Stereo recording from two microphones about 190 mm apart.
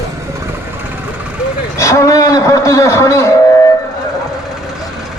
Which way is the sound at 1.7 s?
15° left (ahead or behind).